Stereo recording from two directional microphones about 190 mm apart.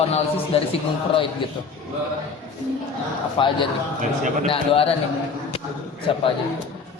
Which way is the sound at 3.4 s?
25° left (ahead or behind).